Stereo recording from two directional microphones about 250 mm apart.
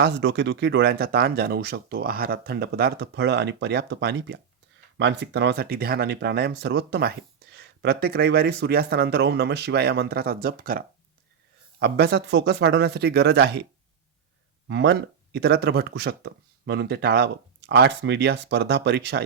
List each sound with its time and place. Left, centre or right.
0.0 s speech: right
14.7 s speech: right